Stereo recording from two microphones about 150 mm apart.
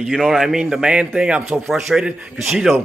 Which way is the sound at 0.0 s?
Centre (ahead or behind).